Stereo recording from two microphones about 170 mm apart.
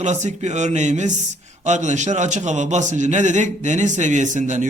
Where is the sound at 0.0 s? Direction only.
45° right (ahead or behind).